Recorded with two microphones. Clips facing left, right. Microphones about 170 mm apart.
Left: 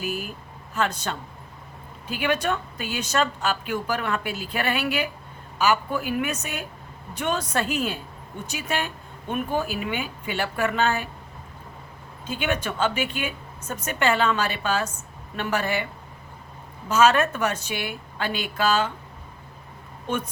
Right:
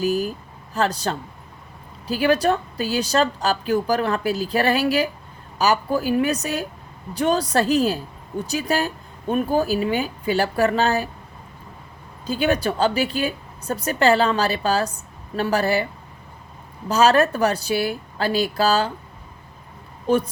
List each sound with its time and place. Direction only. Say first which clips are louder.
0.0 s vehicle: right 9 dB; 35° right (ahead or behind)
0.7 s a woman's voice: right 4 dB; 35° right (ahead or behind)
12.2 s a woman's voice: right 6 dB; 35° right (ahead or behind)
16.9 s a woman's voice: right 3 dB; 35° right (ahead or behind)
20.1 s a woman's voice: right 9 dB; 35° right (ahead or behind)